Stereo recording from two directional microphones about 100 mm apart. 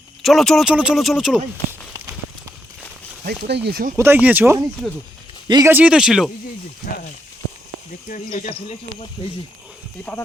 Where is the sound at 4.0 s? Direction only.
20° right (ahead or behind).